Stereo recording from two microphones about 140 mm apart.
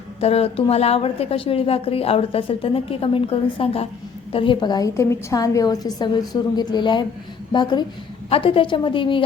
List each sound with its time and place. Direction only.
0.2 s a woman's voice: 45° left (ahead or behind)